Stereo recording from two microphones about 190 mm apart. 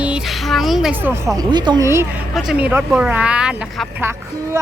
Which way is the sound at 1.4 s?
25° right (ahead or behind).